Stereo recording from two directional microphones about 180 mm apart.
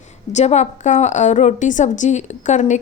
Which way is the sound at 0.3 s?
40° left (ahead or behind).